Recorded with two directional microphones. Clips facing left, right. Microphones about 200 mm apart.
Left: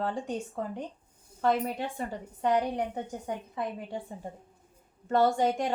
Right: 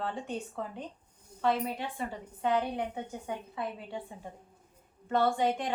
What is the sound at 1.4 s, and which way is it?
A woman's voice, 45° left (ahead or behind).